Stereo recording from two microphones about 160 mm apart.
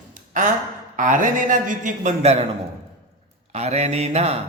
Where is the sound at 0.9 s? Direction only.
55° right (ahead or behind).